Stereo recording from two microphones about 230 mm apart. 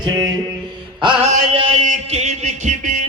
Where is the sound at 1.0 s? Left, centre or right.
Right.